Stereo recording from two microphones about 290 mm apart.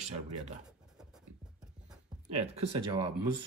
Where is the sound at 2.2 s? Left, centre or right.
Right.